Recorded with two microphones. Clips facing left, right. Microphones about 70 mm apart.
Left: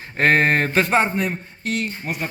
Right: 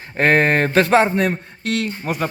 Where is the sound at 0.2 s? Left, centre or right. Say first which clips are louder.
Right 2 dB; right.